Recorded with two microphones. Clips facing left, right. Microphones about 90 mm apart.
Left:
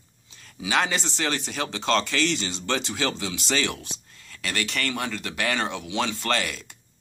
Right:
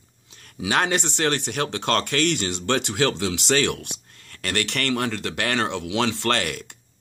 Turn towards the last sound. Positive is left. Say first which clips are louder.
# right 3 dB
turn(degrees=-60)  # may be behind; listen again after turning